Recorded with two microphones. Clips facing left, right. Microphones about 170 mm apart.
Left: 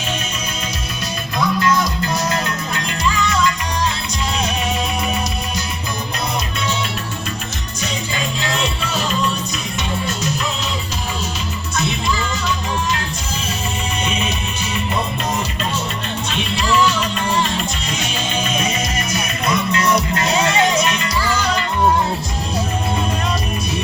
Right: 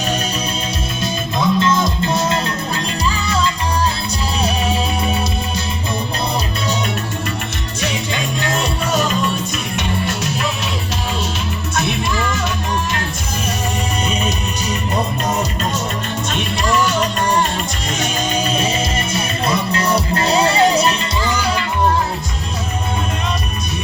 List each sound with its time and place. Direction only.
1.0 s music: 25° right (ahead or behind)
7.8 s music: 60° right (ahead or behind)
9.7 s music: 60° right (ahead or behind)
11.8 s music: 55° right (ahead or behind)
14.1 s music: 40° right (ahead or behind)
21.2 s music: 15° right (ahead or behind)